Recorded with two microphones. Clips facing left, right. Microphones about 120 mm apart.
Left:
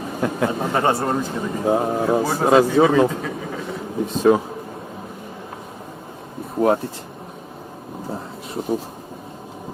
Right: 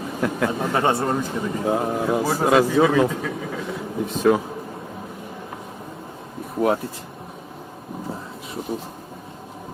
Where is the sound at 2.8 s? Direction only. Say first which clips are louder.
Left 2 dB; 20° left (ahead or behind).